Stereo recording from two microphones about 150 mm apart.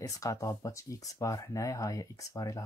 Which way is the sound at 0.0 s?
20° left (ahead or behind).